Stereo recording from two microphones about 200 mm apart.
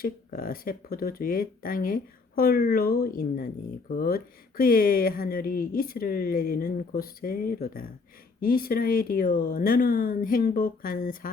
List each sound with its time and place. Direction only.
0.0 s speech: 45° left (ahead or behind)